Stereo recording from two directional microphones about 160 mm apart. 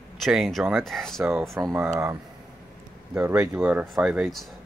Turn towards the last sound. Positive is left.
turn(degrees=0)  # may be behind; listen again after turning